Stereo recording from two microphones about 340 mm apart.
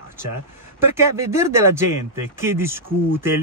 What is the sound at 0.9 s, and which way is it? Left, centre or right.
A man's voice, centre.